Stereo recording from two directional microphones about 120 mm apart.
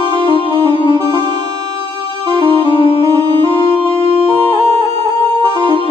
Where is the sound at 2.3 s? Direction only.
45° right (ahead or behind).